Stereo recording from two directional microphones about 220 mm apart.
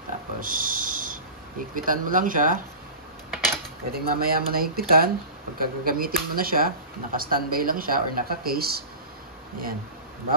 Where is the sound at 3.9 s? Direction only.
45° right (ahead or behind).